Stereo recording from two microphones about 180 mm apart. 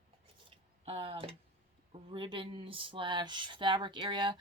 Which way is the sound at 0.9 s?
30° right (ahead or behind).